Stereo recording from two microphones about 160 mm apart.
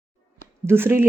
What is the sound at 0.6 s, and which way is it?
Speech, 15° right (ahead or behind).